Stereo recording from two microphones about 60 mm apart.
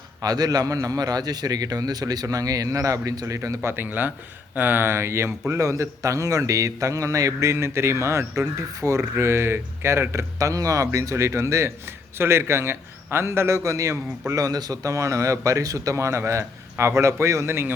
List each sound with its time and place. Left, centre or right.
0.2 s a man's voice: right
3.7 s speech: right
5.5 s a man's voice: right
10.3 s a man's voice: right
12.1 s a man's voice: right